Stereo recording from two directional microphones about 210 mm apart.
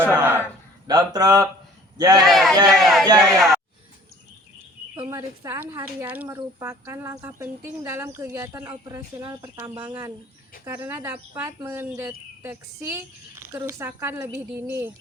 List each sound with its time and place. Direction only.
0.1 s a sound: 10° right (ahead or behind)
0.9 s speech: 20° right (ahead or behind)
2.2 s speech: centre (ahead or behind)
5.0 s speech: 15° right (ahead or behind)